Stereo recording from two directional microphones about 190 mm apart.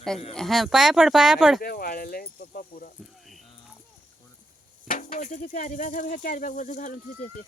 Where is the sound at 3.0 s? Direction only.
Centre (ahead or behind).